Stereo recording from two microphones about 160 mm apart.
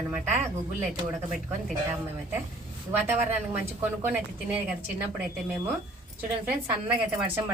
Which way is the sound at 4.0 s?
10° right (ahead or behind).